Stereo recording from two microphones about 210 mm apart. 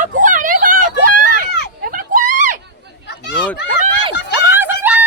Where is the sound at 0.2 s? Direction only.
40° right (ahead or behind).